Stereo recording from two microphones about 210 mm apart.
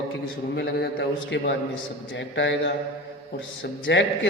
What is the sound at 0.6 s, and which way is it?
A man's voice, 50° left (ahead or behind).